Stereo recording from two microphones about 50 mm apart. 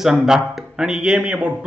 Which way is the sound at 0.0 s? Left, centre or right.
Centre.